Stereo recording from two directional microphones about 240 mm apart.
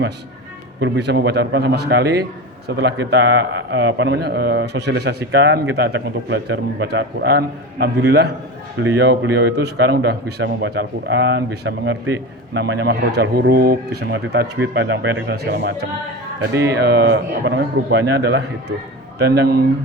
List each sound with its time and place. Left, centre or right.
0.8 s speech: right